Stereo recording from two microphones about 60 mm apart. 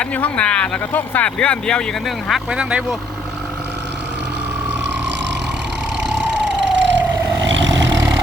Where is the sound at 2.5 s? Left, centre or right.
Centre.